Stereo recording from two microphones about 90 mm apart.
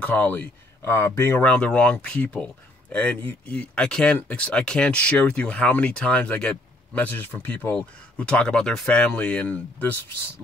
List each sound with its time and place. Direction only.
0.0 s speech: 15° left (ahead or behind)
1.4 s speech: 15° left (ahead or behind)